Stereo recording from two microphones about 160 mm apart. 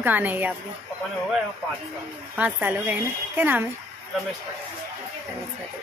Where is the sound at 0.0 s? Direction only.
10° right (ahead or behind).